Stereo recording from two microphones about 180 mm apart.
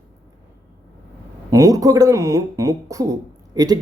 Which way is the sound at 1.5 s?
20° right (ahead or behind).